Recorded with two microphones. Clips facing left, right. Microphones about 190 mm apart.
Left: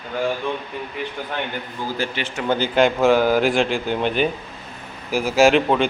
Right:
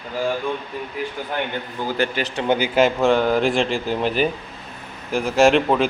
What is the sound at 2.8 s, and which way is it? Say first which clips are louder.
Speech: left 2 dB; centre (ahead or behind).